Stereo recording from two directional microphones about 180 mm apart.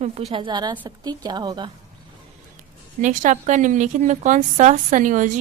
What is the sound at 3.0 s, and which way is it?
Speech, 45° right (ahead or behind).